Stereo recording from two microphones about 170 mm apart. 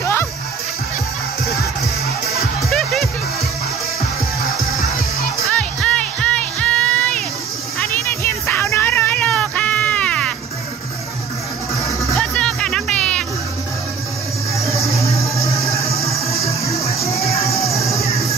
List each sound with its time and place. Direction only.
0.0 s music: 15° left (ahead or behind)
2.7 s music: centre (ahead or behind)
5.4 s music: 5° left (ahead or behind)
12.0 s music: 5° left (ahead or behind)
14.7 s music: 20° left (ahead or behind)
17.1 s music: 35° left (ahead or behind)
17.4 s music: 20° left (ahead or behind)